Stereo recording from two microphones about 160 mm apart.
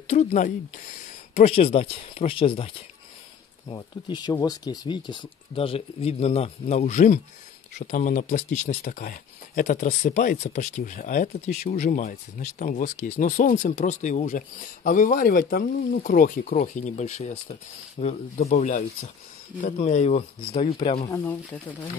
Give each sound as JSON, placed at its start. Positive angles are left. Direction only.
{"t": 0.0, "sound": "speech", "side_deg": 45}